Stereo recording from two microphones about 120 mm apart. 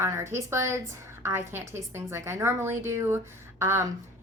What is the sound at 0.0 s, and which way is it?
A woman's voice, 20° right (ahead or behind).